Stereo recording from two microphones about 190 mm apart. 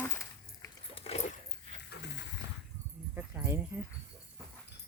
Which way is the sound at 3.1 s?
10° right (ahead or behind).